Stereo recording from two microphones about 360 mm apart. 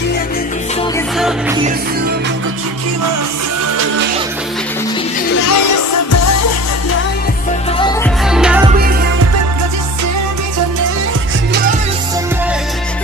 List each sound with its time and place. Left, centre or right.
5.5 s music: left
8.3 s music: centre